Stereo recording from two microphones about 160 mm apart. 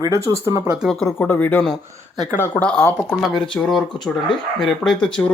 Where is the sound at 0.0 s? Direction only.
20° right (ahead or behind).